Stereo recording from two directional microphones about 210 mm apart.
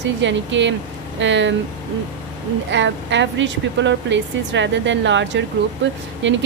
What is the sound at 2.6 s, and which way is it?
A woman's voice, 60° right (ahead or behind).